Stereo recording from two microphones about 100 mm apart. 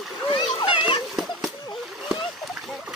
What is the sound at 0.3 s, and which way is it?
Splash, 50° left (ahead or behind).